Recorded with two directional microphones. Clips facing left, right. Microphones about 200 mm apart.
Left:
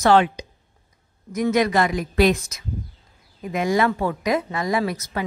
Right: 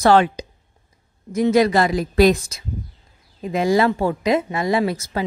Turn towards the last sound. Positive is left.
turn(degrees=-30)  # may be behind; listen again after turning